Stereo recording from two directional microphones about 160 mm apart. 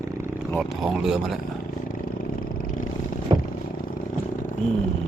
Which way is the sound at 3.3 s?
25° right (ahead or behind).